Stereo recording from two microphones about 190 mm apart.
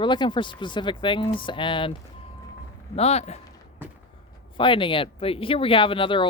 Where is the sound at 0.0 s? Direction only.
25° left (ahead or behind).